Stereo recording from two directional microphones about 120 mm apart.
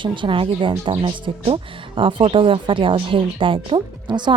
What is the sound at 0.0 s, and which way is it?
Speech, 45° right (ahead or behind).